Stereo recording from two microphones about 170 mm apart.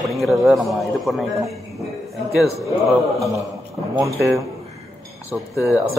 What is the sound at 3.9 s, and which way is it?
Speech, 20° right (ahead or behind).